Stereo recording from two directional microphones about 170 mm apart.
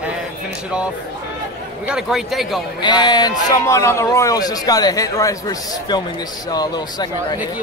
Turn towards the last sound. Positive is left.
turn(degrees=25)  # may be behind; listen again after turning